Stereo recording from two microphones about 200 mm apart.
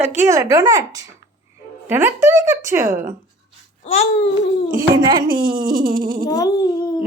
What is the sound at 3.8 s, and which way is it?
Babbling, 30° left (ahead or behind).